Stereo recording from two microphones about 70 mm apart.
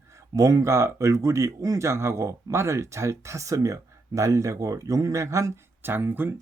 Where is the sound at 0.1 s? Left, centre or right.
Right.